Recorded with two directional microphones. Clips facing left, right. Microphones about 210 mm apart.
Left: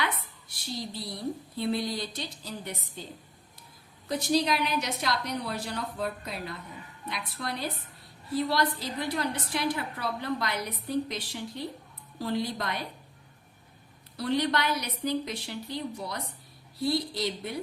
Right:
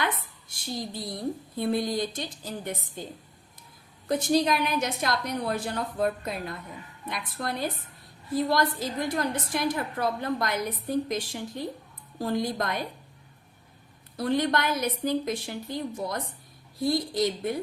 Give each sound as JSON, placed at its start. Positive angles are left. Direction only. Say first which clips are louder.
{"t": 0.4, "sound": "speech", "louder": "right 3 dB", "side_deg": -50}
{"t": 4.1, "sound": "speech", "louder": "right 3 dB", "side_deg": -50}
{"t": 14.2, "sound": "speech", "louder": "right 2 dB", "side_deg": -50}